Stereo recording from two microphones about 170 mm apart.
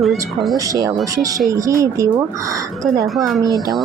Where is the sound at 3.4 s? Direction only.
20° right (ahead or behind).